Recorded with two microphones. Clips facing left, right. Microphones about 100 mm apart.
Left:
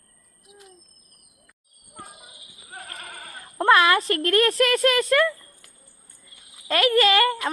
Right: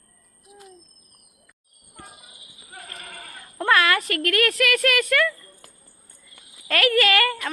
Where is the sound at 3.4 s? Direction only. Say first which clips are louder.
Left 3 dB; 25° left (ahead or behind).